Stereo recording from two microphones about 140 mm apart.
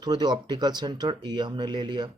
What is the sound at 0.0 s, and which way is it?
Speech, 30° right (ahead or behind).